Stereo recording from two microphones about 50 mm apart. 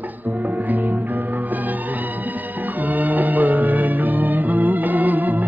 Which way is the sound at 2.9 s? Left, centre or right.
Right.